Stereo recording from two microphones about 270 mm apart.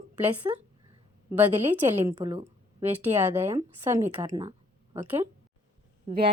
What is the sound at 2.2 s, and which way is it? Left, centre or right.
A woman's voice, centre.